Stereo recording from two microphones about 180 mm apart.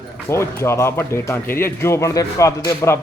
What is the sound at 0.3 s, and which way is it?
Speech, 15° left (ahead or behind).